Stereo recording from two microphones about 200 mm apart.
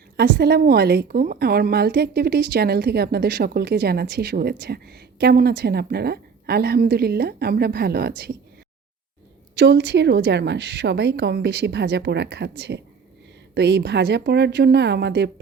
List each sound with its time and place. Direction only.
0.2 s a woman's voice: 50° right (ahead or behind)
9.6 s a woman's voice: 55° right (ahead or behind)